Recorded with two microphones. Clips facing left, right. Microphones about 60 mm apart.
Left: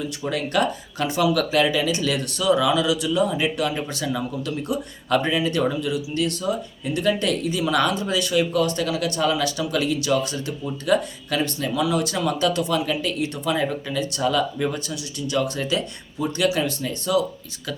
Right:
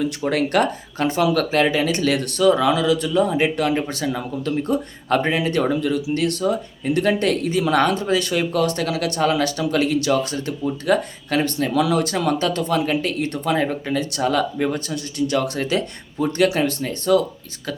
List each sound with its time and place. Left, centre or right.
0.0 s speech: right
0.9 s speech: right